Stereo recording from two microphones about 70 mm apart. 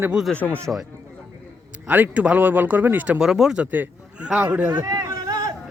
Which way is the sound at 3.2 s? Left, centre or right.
Centre.